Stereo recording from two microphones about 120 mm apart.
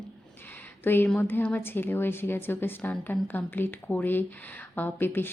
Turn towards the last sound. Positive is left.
turn(degrees=15)  # may be behind; listen again after turning